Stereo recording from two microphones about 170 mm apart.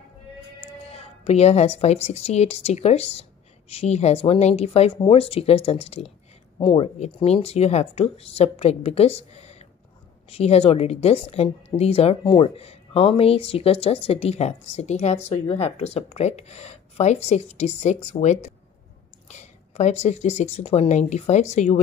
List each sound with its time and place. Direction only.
1.2 s a woman's voice: 40° left (ahead or behind)